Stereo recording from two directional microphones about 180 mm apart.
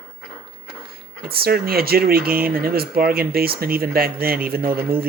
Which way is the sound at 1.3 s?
60° right (ahead or behind).